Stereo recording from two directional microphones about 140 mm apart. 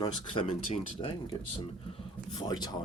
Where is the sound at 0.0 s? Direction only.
40° left (ahead or behind).